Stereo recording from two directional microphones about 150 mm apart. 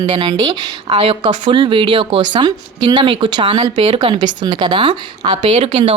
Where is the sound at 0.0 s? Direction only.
30° right (ahead or behind).